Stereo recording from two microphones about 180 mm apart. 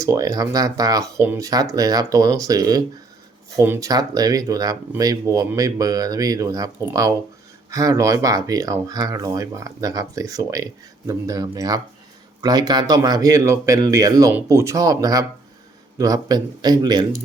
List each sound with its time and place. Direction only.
0.0 s speech: 20° right (ahead or behind)